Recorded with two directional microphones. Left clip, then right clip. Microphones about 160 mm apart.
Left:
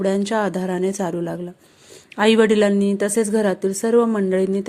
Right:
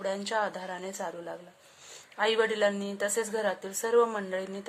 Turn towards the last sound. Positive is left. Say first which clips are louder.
# left 14 dB
turn(degrees=35)  # may be behind; listen again after turning